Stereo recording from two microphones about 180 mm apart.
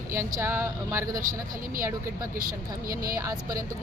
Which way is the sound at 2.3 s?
50° right (ahead or behind).